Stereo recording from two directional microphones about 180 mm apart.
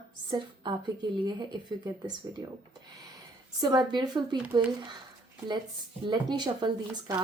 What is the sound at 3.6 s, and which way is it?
Speech, 25° right (ahead or behind).